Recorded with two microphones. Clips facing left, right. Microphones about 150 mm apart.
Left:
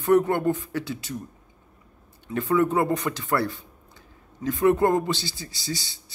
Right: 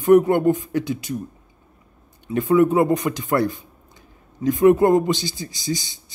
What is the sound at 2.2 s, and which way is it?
Speech, 15° right (ahead or behind).